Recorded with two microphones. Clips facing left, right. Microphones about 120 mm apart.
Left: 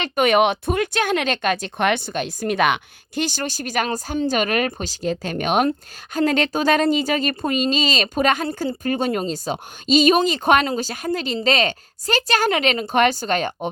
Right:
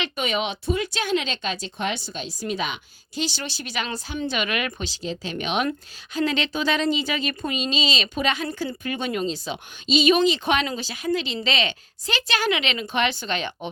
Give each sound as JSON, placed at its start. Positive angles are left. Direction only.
{"t": 0.0, "sound": "speech", "side_deg": 55}